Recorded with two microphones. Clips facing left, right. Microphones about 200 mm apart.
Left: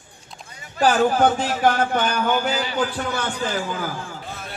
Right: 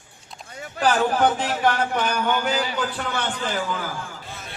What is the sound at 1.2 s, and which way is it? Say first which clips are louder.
Speech: left 2 dB; 40° left (ahead or behind).